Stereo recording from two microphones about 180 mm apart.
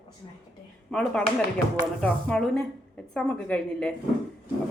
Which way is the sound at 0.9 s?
5° left (ahead or behind).